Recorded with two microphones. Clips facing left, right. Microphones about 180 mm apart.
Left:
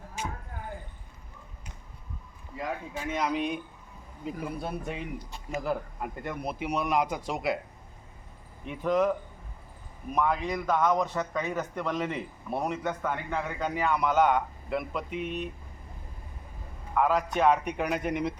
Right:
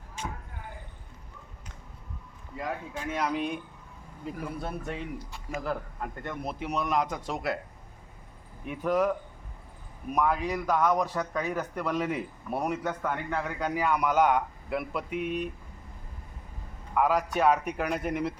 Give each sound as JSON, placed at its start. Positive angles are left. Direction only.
{"t": 0.2, "sound": "a sound", "side_deg": 10}
{"t": 2.6, "sound": "speech", "side_deg": 5}
{"t": 4.4, "sound": "a man's voice", "side_deg": 0}
{"t": 8.6, "sound": "a man's voice", "side_deg": -5}
{"t": 10.1, "sound": "a man's voice", "side_deg": -10}
{"t": 16.9, "sound": "a man's voice", "side_deg": -10}